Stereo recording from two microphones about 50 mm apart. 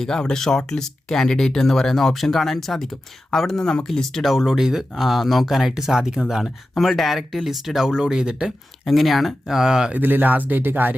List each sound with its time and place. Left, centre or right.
0.0 s speech: centre
8.9 s speech: centre
10.0 s speech: right